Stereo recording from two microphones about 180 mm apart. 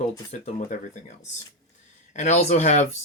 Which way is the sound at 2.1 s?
40° left (ahead or behind).